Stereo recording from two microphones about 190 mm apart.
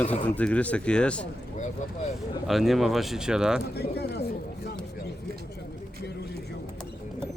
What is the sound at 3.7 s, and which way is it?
Speech, 60° left (ahead or behind).